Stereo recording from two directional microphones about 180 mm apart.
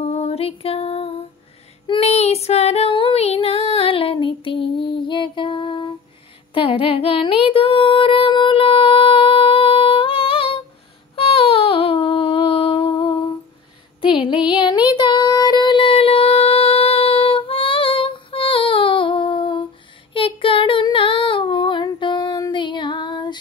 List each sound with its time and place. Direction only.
0.0 s music: 35° left (ahead or behind)
1.9 s female singing: 35° left (ahead or behind)
5.0 s music: 25° left (ahead or behind)
6.5 s a sound: 30° left (ahead or behind)
14.0 s music: 30° left (ahead or behind)
14.5 s child singing: 25° left (ahead or behind)
20.2 s female singing: 30° left (ahead or behind)